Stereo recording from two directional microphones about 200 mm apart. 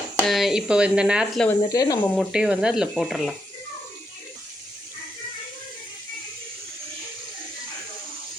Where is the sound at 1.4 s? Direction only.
20° left (ahead or behind).